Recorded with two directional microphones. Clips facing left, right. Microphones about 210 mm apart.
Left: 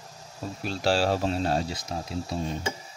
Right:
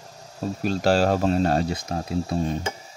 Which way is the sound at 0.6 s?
45° right (ahead or behind).